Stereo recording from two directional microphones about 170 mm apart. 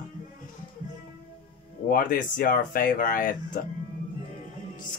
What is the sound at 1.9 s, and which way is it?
Speech, 55° left (ahead or behind).